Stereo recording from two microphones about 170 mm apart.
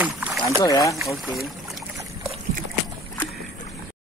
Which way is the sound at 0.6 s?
20° left (ahead or behind).